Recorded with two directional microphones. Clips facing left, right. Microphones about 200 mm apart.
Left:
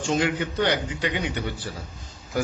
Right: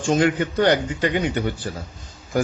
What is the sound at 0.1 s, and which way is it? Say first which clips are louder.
A man's voice: right 5 dB; 50° right (ahead or behind).